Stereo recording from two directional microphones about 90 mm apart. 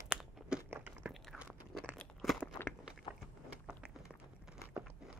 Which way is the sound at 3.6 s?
15° right (ahead or behind).